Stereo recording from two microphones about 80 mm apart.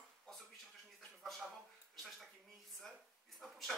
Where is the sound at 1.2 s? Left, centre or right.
Centre.